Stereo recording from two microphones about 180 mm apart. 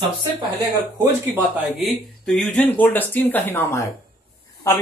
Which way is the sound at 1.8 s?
Centre (ahead or behind).